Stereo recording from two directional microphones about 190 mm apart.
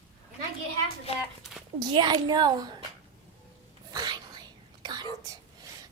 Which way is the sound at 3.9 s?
20° right (ahead or behind).